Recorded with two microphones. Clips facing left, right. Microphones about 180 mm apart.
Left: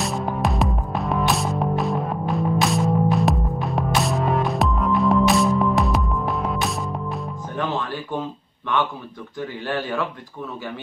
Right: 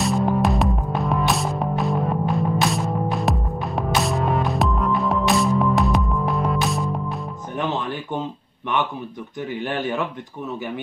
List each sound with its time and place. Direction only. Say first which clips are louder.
0.0 s music: right 4 dB; centre (ahead or behind)
7.5 s music: right 1 dB; 20° right (ahead or behind)
9.5 s speech: right 2 dB; 20° right (ahead or behind)